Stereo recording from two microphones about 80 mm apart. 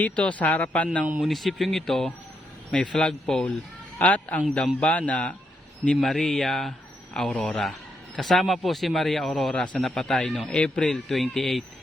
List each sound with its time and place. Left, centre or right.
0.0 s speech: centre
1.2 s speech: centre
3.9 s a man's voice: centre
6.0 s speech: centre